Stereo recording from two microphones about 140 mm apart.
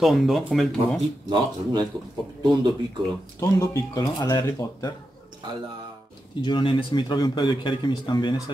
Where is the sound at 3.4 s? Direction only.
25° left (ahead or behind).